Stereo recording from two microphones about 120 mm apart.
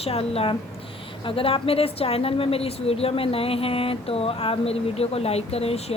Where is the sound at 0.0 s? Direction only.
55° left (ahead or behind).